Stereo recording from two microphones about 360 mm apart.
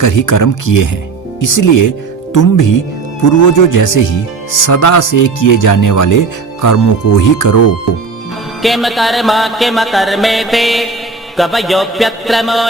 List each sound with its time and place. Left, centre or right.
0.0 s speech: left
8.6 s music: centre